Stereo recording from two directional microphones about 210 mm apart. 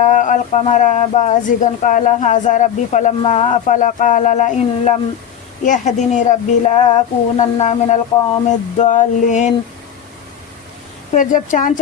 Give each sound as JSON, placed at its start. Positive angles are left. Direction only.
{"t": 0.0, "sound": "speech", "side_deg": 35}
{"t": 11.1, "sound": "speech", "side_deg": 35}